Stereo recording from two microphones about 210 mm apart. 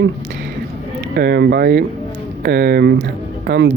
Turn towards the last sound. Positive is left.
turn(degrees=-55)  # may be behind; listen again after turning